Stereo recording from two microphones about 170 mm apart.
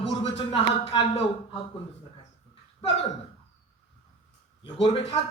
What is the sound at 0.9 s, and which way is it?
Speech, 30° left (ahead or behind).